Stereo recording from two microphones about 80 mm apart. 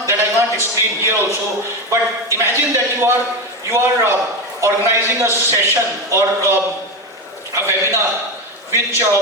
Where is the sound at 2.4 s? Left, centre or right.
Right.